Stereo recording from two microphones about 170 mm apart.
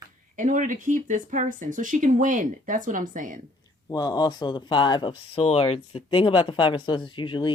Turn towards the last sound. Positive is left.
turn(degrees=30)  # may be behind; listen again after turning